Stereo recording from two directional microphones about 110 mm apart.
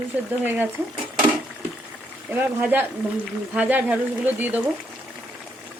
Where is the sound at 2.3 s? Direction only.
15° right (ahead or behind).